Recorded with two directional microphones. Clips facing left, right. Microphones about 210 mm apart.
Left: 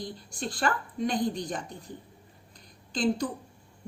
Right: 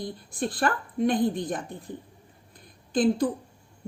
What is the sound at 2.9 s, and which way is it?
Speech, 55° right (ahead or behind).